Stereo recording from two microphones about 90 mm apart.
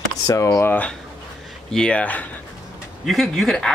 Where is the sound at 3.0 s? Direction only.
Centre (ahead or behind).